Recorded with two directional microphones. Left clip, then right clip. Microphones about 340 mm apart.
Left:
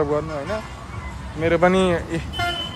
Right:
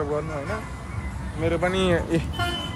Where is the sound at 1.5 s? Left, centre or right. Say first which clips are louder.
Left 8 dB; left.